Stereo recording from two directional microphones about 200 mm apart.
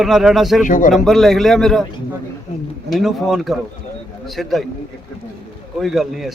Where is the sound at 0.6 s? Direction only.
40° left (ahead or behind).